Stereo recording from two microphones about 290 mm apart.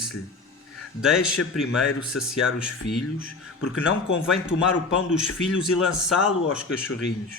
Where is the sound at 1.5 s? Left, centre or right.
Centre.